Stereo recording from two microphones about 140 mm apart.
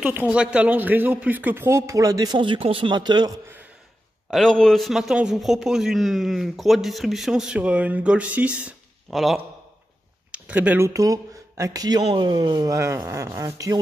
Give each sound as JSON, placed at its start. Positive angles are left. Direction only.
{"t": 0.0, "sound": "speech", "side_deg": -10}
{"t": 4.3, "sound": "a man's voice", "side_deg": 5}
{"t": 10.3, "sound": "speech", "side_deg": -10}
{"t": 10.9, "sound": "speech", "side_deg": -25}